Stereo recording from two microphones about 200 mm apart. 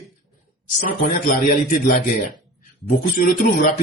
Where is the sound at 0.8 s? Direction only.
40° left (ahead or behind).